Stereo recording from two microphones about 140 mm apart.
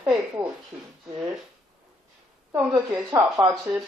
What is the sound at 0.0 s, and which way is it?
Speech, 10° right (ahead or behind).